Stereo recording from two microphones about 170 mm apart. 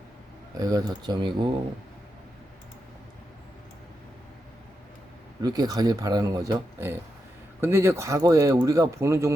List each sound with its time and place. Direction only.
0.5 s speech: 20° right (ahead or behind)
5.4 s speech: 25° right (ahead or behind)